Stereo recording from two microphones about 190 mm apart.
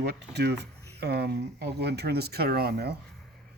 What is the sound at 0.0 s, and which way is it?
Speech, 60° right (ahead or behind).